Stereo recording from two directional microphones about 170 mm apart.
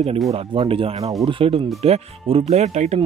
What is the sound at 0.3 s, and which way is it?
Speech, 35° right (ahead or behind).